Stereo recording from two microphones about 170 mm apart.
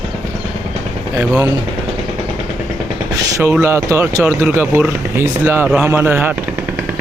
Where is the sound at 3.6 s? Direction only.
15° right (ahead or behind).